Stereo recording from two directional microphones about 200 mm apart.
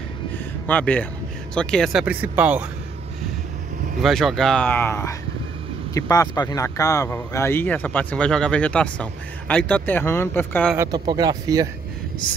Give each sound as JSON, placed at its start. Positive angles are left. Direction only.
{"t": 0.7, "sound": "speech", "side_deg": 5}
{"t": 4.0, "sound": "speech", "side_deg": 0}
{"t": 10.8, "sound": "speech", "side_deg": -20}